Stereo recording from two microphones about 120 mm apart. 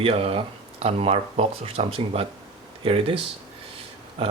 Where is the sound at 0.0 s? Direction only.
55° right (ahead or behind).